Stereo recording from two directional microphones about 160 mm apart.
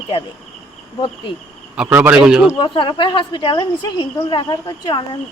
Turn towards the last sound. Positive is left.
turn(degrees=30)  # may be behind; listen again after turning